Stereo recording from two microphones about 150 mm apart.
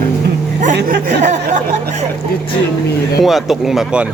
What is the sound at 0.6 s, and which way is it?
Speech, 60° right (ahead or behind).